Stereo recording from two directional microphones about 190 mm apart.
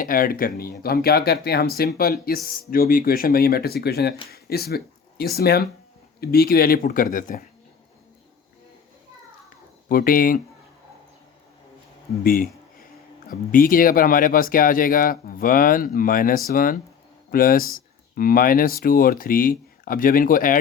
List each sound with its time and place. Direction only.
0.0 s speech: 50° left (ahead or behind)
4.3 s a sound: 55° left (ahead or behind)
5.3 s speech: 55° left (ahead or behind)
9.9 s speech: 50° left (ahead or behind)
12.2 s speech: 50° left (ahead or behind)
13.5 s speech: 45° left (ahead or behind)